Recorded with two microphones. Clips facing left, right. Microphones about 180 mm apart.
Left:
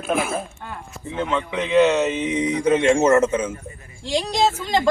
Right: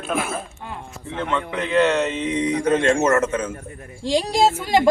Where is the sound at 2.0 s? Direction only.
20° left (ahead or behind).